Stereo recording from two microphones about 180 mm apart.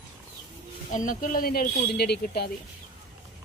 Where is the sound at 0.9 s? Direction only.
45° left (ahead or behind); by 2.5 s 60° left (ahead or behind).